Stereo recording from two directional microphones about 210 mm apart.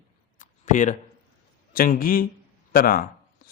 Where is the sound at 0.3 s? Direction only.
35° left (ahead or behind).